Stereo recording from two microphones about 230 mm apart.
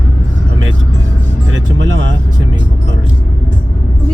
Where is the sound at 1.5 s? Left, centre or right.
Right.